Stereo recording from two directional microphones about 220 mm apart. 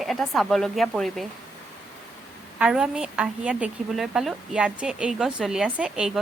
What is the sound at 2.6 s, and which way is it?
A woman's voice, 5° right (ahead or behind).